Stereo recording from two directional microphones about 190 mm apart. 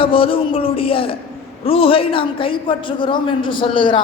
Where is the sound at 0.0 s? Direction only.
30° left (ahead or behind).